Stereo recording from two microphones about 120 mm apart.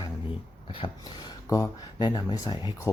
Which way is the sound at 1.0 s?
35° left (ahead or behind).